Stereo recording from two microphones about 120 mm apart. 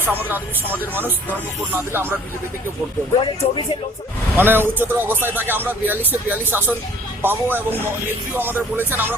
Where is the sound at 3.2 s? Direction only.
45° left (ahead or behind).